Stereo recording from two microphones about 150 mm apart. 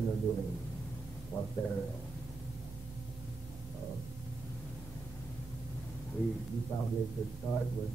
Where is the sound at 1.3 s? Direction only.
15° left (ahead or behind).